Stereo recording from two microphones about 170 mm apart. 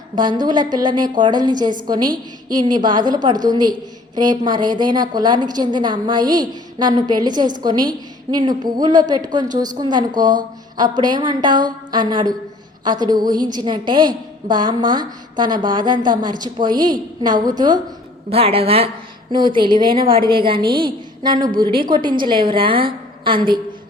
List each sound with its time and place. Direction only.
0.2 s a woman's voice: 25° right (ahead or behind)
18.3 s a woman's voice: 35° right (ahead or behind)